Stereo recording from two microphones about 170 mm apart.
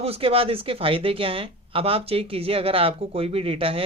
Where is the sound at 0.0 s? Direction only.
35° right (ahead or behind).